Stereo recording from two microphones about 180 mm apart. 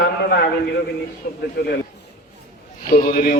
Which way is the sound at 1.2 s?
55° left (ahead or behind).